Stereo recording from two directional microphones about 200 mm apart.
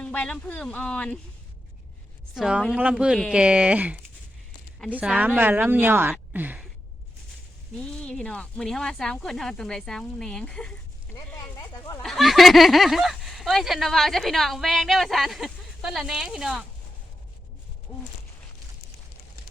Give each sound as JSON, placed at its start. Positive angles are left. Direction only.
{"t": 0.0, "sound": "speech", "side_deg": 5}
{"t": 2.3, "sound": "speech", "side_deg": 0}
{"t": 7.8, "sound": "speech", "side_deg": 5}
{"t": 11.1, "sound": "a sound", "side_deg": 15}
{"t": 12.0, "sound": "speech", "side_deg": 0}